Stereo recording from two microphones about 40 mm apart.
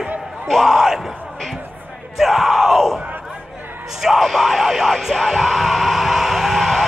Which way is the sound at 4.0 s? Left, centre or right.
Centre.